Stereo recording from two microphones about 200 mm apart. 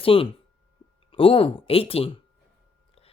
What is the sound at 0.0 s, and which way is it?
Speech, 25° left (ahead or behind).